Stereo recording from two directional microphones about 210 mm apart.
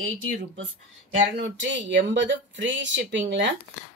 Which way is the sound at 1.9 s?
60° right (ahead or behind).